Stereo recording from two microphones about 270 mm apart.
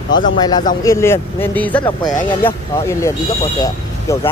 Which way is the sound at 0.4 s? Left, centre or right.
Centre.